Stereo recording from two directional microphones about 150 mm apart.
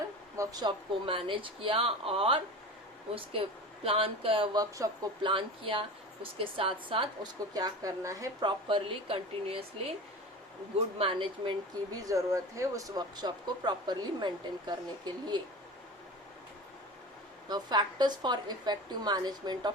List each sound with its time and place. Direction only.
0.3 s a woman's voice: 25° right (ahead or behind)
3.8 s a woman's voice: 35° right (ahead or behind)
10.9 s speech: 35° right (ahead or behind)
17.5 s speech: 30° right (ahead or behind)